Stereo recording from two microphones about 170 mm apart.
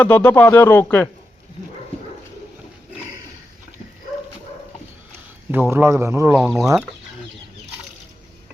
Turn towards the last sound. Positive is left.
turn(degrees=0)  # may be behind; listen again after turning